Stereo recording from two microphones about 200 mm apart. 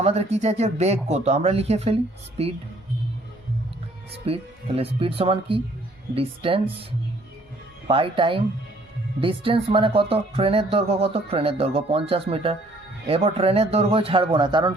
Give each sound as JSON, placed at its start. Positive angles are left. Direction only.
{"t": 0.0, "sound": "speech", "side_deg": -30}
{"t": 4.3, "sound": "speech", "side_deg": -30}
{"t": 7.9, "sound": "speech", "side_deg": -25}